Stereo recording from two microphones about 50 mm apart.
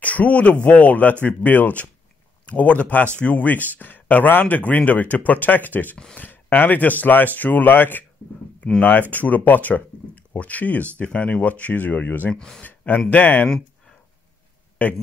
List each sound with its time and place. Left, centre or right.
0.0 s speech: left
9.1 s speech: left
12.4 s speech: centre
12.6 s speech: left
14.8 s speech: left